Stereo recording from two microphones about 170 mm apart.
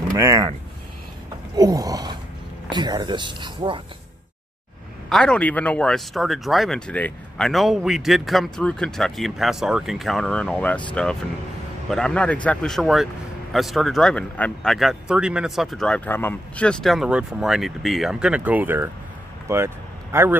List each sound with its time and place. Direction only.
0.1 s speech: 20° right (ahead or behind)
1.6 s speech: 20° right (ahead or behind)
5.1 s speech: 5° left (ahead or behind)
11.9 s speech: 5° left (ahead or behind); by 18.9 s 10° right (ahead or behind)
19.4 s vehicle: 15° right (ahead or behind)